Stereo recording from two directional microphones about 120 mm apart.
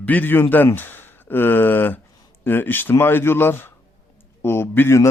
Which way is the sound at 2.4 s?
15° left (ahead or behind).